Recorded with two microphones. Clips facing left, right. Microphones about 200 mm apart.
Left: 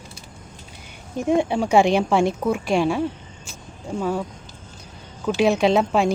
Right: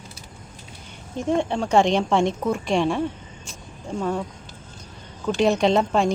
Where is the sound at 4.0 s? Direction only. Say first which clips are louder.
Left 1 dB; 5° left (ahead or behind).